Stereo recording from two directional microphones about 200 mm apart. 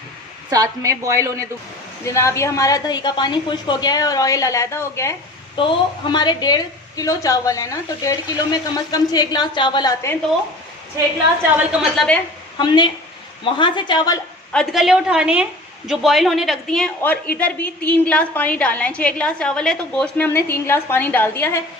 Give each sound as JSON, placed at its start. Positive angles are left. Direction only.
{"t": 0.5, "sound": "a woman's voice", "side_deg": -15}
{"t": 2.0, "sound": "a woman's voice", "side_deg": 15}
{"t": 5.5, "sound": "a woman's voice", "side_deg": 25}
{"t": 11.5, "sound": "a woman's voice", "side_deg": 0}
{"t": 12.5, "sound": "a woman's voice", "side_deg": 20}
{"t": 14.5, "sound": "a woman's voice", "side_deg": 0}